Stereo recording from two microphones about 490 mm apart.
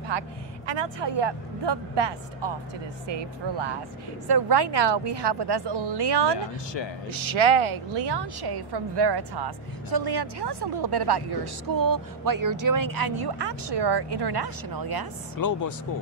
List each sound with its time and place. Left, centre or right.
0.1 s a woman's voice: right
7.1 s a woman's voice: right
15.4 s speech: left